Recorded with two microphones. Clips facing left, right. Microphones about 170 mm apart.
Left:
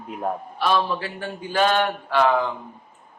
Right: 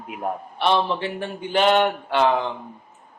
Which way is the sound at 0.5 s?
25° right (ahead or behind).